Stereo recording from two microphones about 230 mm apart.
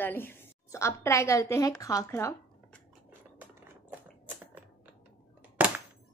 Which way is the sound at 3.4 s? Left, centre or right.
Centre.